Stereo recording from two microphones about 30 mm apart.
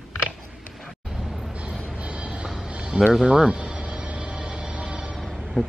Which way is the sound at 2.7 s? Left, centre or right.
Right.